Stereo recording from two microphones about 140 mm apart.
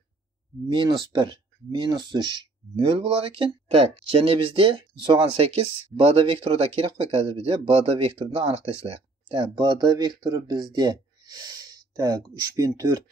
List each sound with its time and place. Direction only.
0.7 s speech: 35° right (ahead or behind)